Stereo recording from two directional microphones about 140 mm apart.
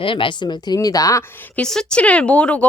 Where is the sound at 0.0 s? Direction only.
40° left (ahead or behind).